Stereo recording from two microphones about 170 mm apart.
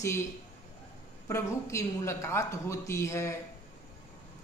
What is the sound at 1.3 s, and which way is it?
A woman's voice, 15° left (ahead or behind).